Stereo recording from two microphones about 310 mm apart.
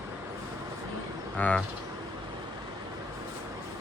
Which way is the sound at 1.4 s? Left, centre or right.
Centre.